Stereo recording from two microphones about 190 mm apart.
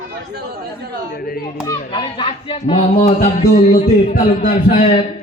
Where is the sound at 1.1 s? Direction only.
50° left (ahead or behind).